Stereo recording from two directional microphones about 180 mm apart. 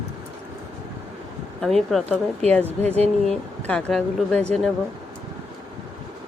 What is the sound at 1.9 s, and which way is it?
Speech, centre (ahead or behind).